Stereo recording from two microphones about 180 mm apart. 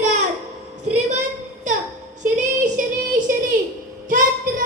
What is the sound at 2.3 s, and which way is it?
Child singing, 45° right (ahead or behind).